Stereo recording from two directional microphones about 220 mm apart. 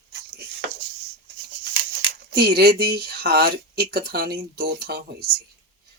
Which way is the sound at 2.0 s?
45° right (ahead or behind).